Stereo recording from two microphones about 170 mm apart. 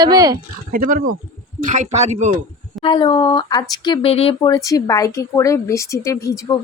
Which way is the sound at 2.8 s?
30° left (ahead or behind).